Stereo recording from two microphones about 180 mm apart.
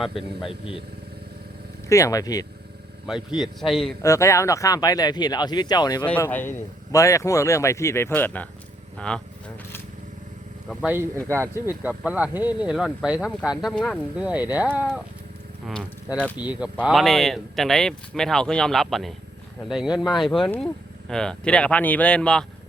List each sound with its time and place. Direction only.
0.0 s speech: centre (ahead or behind)
1.9 s speech: 15° left (ahead or behind)
3.1 s speech: 5° right (ahead or behind)
4.0 s speech: 15° left (ahead or behind)
6.1 s speech: 10° left (ahead or behind)
10.7 s speech: 5° right (ahead or behind)